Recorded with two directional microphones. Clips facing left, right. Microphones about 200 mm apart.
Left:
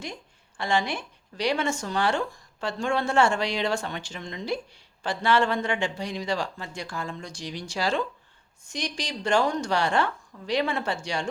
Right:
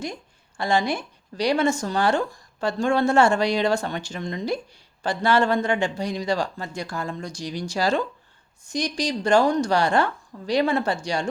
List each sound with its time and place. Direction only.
0.5 s speech: 40° right (ahead or behind)